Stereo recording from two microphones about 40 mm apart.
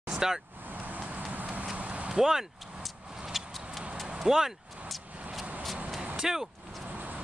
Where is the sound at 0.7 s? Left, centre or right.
Right.